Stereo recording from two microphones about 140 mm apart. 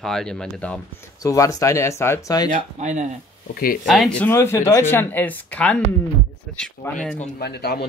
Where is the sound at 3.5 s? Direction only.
90° left.